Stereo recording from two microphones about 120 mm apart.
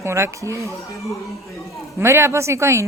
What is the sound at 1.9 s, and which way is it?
Speech, 25° right (ahead or behind).